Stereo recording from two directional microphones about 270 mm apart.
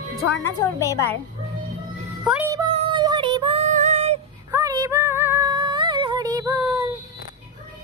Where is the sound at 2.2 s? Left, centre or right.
Centre; by 4.2 s right.